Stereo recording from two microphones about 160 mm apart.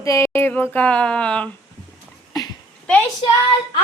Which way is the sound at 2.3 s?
25° left (ahead or behind).